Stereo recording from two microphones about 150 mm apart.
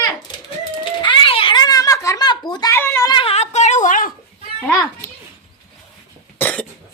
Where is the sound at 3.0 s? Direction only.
30° left (ahead or behind).